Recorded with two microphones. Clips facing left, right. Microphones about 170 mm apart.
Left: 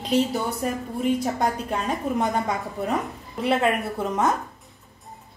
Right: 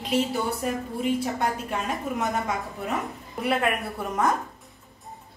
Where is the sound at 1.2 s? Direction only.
35° left (ahead or behind).